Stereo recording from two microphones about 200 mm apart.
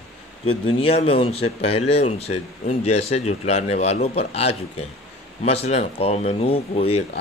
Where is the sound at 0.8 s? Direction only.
30° left (ahead or behind).